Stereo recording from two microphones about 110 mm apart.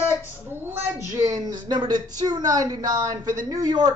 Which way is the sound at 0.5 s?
20° right (ahead or behind).